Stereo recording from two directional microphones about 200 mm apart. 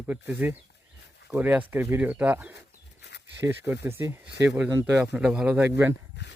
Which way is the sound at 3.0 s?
60° left (ahead or behind).